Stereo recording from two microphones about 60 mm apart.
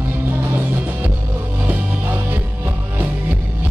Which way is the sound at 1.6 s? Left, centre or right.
Right.